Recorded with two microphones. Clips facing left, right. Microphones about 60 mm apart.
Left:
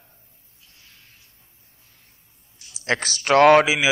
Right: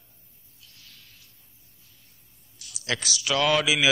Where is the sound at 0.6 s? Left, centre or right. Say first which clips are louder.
Even; left.